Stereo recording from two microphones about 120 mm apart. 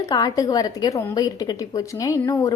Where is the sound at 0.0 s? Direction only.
30° left (ahead or behind).